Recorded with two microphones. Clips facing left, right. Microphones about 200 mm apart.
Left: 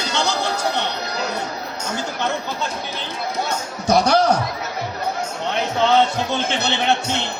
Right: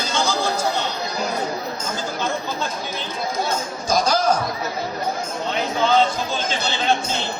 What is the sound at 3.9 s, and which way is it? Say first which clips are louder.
Music: left 4 dB; 65° left (ahead or behind).